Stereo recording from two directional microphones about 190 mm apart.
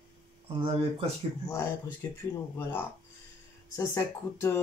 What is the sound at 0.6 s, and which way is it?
Speech, 30° right (ahead or behind).